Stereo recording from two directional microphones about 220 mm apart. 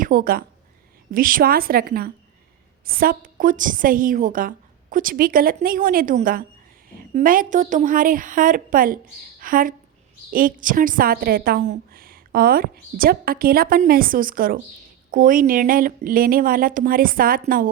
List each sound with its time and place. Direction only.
0.0 s a woman's voice: 40° right (ahead or behind)